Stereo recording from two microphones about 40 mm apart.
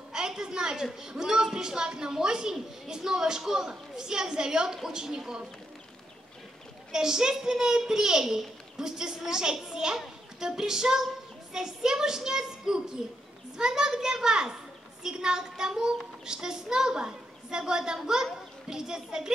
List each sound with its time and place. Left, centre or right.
0.1 s a sound: centre
1.0 s a child's voice: centre
6.9 s a child's voice: centre